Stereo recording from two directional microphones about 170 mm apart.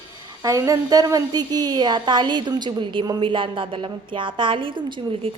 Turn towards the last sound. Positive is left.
turn(degrees=-30)  # may be behind; listen again after turning